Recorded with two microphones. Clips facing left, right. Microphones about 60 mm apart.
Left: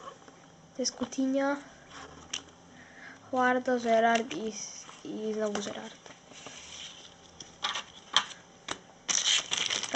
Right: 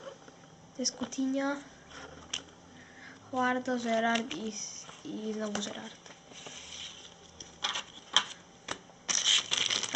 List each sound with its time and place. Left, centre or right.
0.9 s speech: centre
1.2 s speech: centre
1.5 s a sound: centre
3.3 s speech: centre
5.0 s speech: centre
6.4 s a sound: centre
7.6 s typewriter: centre
9.2 s crushing: centre